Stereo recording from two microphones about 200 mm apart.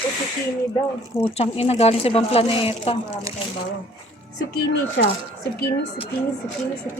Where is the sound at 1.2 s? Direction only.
30° left (ahead or behind).